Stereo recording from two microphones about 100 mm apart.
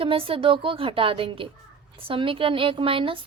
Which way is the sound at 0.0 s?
65° right (ahead or behind).